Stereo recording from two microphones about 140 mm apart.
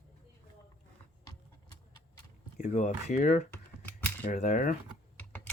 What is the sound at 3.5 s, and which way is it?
Computer keyboard, 15° left (ahead or behind).